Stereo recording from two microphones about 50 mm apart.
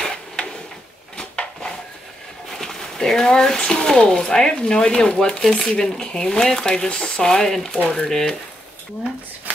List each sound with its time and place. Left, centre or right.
1.1 s drawer open or close: centre
2.5 s speech: centre